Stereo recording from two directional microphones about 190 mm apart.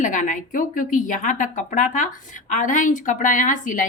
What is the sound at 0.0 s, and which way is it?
A woman's voice, 40° left (ahead or behind).